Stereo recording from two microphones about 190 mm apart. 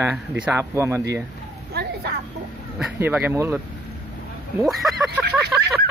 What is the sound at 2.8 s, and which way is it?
Speech, 5° right (ahead or behind).